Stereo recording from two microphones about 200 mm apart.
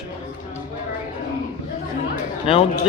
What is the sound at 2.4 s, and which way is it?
Speech, 30° left (ahead or behind).